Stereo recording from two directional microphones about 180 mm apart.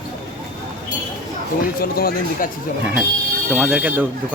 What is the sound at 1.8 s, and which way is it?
Speech, 55° left (ahead or behind).